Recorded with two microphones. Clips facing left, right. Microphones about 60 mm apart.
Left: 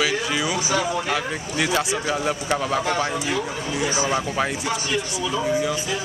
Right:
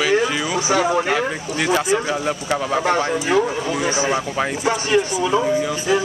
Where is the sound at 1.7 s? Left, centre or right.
Centre.